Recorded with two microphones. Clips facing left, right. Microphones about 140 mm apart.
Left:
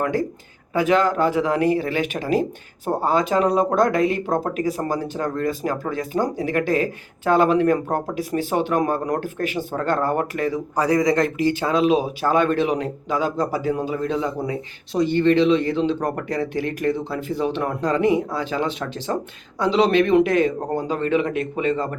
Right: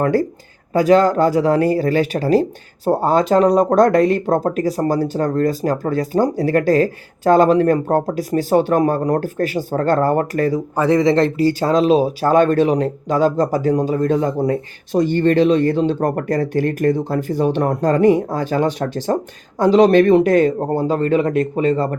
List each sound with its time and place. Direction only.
0.0 s speech: 40° right (ahead or behind)
10.8 s speech: 25° right (ahead or behind)